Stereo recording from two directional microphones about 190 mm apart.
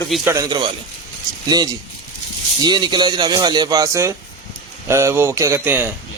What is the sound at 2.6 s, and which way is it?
Speech, 25° right (ahead or behind).